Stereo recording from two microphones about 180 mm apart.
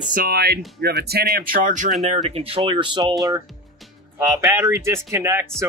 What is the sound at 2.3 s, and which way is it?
Speech, 35° right (ahead or behind).